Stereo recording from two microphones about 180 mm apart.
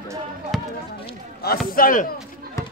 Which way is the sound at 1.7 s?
50° left (ahead or behind).